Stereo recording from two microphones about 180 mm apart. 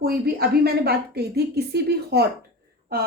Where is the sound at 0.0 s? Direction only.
60° right (ahead or behind).